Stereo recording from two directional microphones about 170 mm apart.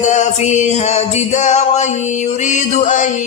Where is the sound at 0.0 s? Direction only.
45° left (ahead or behind).